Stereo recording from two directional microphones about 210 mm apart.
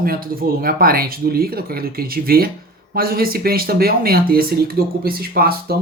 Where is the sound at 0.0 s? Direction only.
45° right (ahead or behind).